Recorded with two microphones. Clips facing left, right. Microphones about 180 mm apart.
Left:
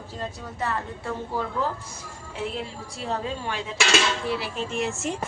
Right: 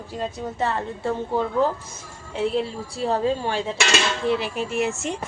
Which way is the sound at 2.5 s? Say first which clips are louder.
Right 8 dB; 35° right (ahead or behind).